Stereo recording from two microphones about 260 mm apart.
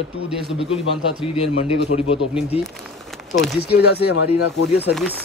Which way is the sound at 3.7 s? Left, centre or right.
Left.